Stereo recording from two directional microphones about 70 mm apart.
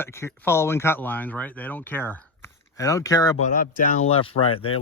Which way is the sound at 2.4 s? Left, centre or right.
Left.